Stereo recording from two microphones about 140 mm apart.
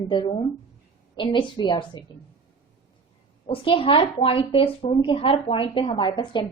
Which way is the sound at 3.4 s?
40° left (ahead or behind).